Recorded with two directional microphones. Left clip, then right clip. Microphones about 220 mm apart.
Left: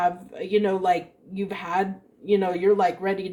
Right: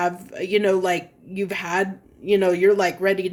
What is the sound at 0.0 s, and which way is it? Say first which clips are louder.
Speech: even; 45° right (ahead or behind).